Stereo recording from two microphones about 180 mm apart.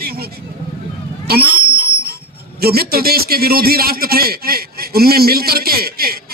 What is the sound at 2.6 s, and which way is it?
Speech, 60° right (ahead or behind).